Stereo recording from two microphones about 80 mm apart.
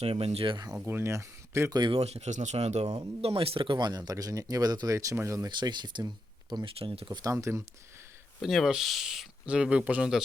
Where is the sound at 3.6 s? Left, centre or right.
Right.